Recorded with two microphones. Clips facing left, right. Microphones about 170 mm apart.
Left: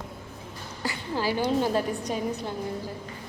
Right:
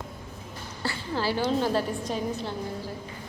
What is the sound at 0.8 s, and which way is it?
A woman's voice, 15° left (ahead or behind).